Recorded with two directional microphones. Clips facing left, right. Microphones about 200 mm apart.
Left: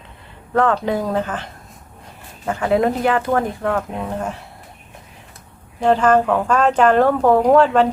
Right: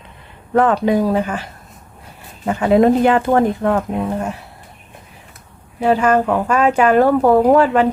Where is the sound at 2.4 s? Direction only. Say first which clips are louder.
Right 5 dB; 20° right (ahead or behind).